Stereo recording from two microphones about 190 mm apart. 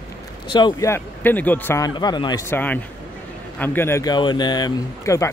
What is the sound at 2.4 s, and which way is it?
Speech, 10° left (ahead or behind).